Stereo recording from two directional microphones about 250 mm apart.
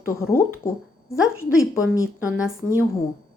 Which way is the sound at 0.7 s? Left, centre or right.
Centre.